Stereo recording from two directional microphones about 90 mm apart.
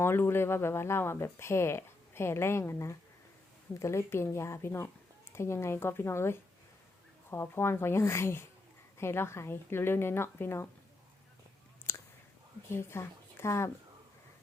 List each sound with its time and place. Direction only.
0.0 s speech: 25° left (ahead or behind)
11.9 s a sound: 30° left (ahead or behind)
12.7 s speech: 30° left (ahead or behind)